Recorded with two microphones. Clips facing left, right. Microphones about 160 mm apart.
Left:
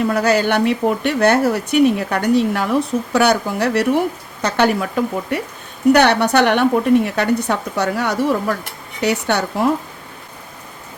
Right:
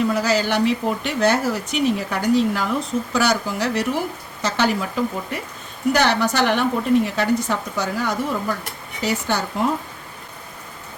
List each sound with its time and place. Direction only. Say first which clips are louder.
0.1 s a woman's voice: left 4 dB; 60° left (ahead or behind)